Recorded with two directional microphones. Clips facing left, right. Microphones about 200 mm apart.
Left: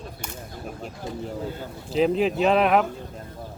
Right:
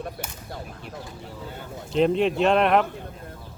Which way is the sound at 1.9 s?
Centre (ahead or behind).